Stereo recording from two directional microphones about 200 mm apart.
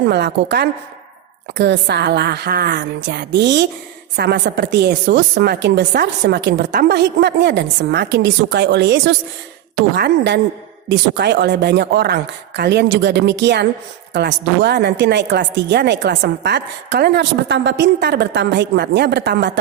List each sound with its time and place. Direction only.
0.1 s a woman's voice: 55° right (ahead or behind)